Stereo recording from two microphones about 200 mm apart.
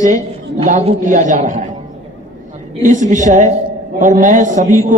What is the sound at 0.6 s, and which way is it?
A man's voice, 30° right (ahead or behind).